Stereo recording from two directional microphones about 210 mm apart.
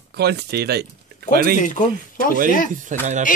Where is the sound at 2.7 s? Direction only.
35° right (ahead or behind).